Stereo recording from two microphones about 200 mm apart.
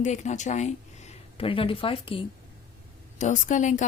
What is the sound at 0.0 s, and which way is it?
Speech, 35° left (ahead or behind).